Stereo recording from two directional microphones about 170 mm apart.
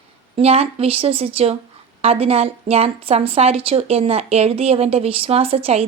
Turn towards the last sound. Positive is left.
turn(degrees=-35)  # may be behind; listen again after turning